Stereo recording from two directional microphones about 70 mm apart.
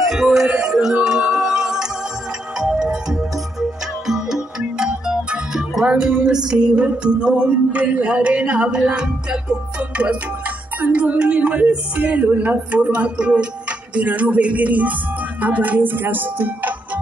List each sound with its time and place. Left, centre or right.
0.1 s music: centre; by 15.0 s right
15.4 s speech: right